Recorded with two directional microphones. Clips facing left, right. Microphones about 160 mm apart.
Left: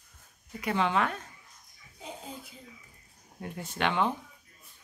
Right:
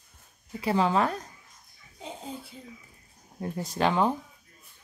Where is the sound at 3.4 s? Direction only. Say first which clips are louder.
Right 5 dB; 35° right (ahead or behind).